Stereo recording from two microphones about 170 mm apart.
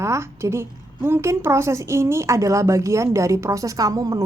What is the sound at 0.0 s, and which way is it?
A woman's voice, 15° right (ahead or behind).